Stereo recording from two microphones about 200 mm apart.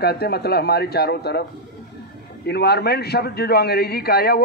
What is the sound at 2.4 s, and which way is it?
A man's voice, 55° left (ahead or behind).